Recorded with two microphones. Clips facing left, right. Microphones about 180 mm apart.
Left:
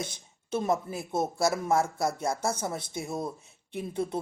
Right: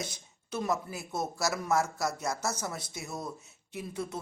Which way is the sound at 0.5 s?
25° left (ahead or behind).